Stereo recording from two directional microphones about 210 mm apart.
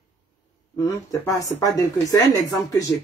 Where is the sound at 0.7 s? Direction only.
15° left (ahead or behind).